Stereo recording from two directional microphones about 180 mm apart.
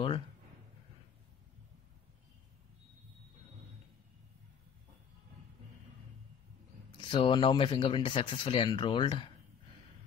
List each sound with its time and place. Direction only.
7.1 s speech: 25° left (ahead or behind)